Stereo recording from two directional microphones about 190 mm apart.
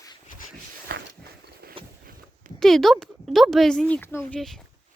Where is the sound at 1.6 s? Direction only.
55° right (ahead or behind).